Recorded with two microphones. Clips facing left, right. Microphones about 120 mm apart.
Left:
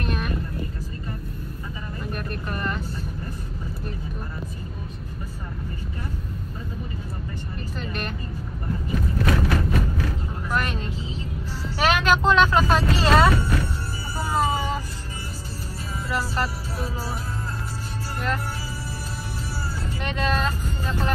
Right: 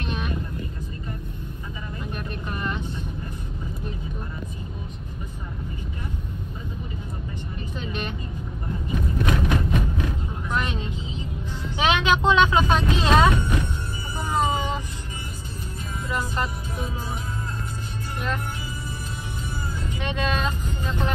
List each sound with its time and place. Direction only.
2.1 s vehicle: centre (ahead or behind)
7.8 s vehicle: centre (ahead or behind)
9.2 s a sound: 20° right (ahead or behind)
10.5 s vehicle: centre (ahead or behind)
16.1 s music: 5° left (ahead or behind)
20.0 s vehicle: centre (ahead or behind)